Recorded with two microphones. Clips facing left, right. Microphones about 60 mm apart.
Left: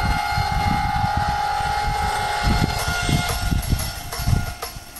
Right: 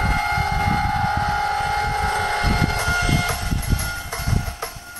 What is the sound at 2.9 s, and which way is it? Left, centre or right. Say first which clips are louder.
Train: right 2 dB; right.